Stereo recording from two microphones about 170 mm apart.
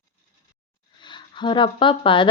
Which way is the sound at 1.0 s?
25° left (ahead or behind).